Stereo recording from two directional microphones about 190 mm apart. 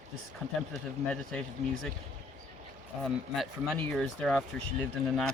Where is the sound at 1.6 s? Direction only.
35° right (ahead or behind).